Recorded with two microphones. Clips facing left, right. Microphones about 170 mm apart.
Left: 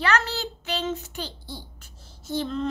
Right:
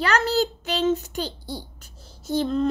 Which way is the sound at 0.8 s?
40° right (ahead or behind).